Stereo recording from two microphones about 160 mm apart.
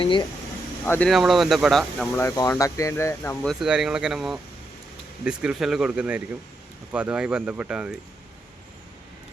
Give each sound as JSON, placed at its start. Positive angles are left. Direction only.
{"t": 0.0, "sound": "speech", "side_deg": 30}
{"t": 0.9, "sound": "speech", "side_deg": 5}
{"t": 2.1, "sound": "speech", "side_deg": 20}
{"t": 3.4, "sound": "speech", "side_deg": 0}